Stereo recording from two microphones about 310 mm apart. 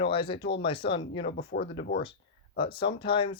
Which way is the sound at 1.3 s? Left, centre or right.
Left.